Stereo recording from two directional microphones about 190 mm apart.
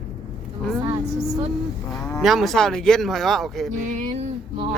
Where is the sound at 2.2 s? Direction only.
Centre (ahead or behind).